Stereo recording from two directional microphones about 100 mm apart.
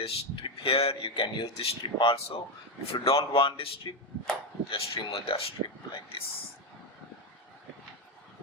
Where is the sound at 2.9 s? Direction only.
65° left (ahead or behind).